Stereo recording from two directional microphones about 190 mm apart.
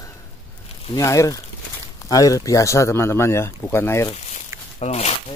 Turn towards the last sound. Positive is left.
turn(degrees=35)  # may be behind; listen again after turning